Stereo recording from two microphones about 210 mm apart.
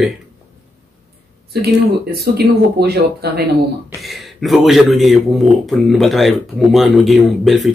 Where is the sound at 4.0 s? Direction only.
Centre (ahead or behind).